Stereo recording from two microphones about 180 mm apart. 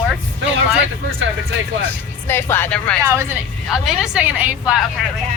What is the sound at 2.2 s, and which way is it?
Speech, 10° left (ahead or behind).